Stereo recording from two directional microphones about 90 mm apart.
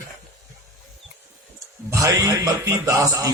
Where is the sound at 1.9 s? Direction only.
40° right (ahead or behind).